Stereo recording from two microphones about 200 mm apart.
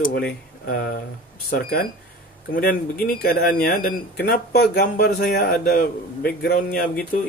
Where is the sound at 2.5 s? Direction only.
45° left (ahead or behind).